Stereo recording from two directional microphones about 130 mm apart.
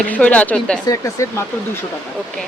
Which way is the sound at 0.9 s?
25° left (ahead or behind).